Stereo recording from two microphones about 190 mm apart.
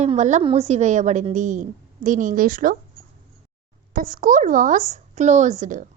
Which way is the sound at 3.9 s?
45° right (ahead or behind).